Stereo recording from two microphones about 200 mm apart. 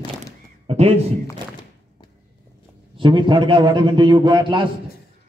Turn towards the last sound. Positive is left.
turn(degrees=-25)  # may be behind; listen again after turning